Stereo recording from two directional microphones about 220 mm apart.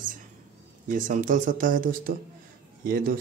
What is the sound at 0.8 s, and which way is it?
Speech, 35° right (ahead or behind).